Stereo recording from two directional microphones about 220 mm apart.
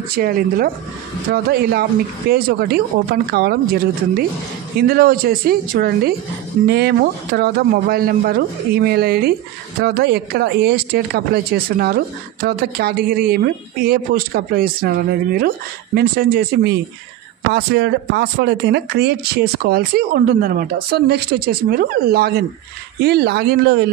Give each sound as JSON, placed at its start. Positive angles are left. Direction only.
{"t": 0.1, "sound": "speech", "side_deg": -40}